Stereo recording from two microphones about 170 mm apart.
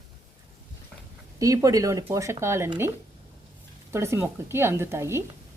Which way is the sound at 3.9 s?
15° right (ahead or behind).